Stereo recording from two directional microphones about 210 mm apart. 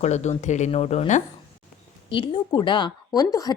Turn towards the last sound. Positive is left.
turn(degrees=15)  # may be behind; listen again after turning